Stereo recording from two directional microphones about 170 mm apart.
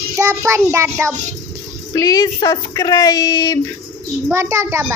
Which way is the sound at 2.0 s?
20° left (ahead or behind).